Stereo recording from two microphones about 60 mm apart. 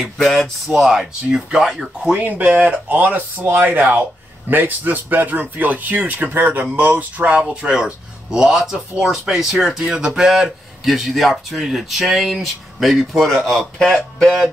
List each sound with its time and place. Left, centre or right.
0.0 s a man's voice: centre
2.1 s a man's voice: right; by 14.5 s centre